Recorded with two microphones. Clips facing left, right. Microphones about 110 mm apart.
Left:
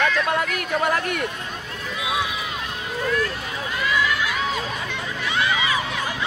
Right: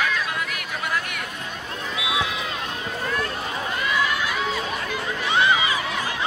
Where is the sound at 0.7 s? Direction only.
45° left (ahead or behind).